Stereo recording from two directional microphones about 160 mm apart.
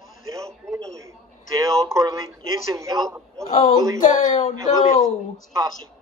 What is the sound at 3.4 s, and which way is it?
Speech, 25° left (ahead or behind).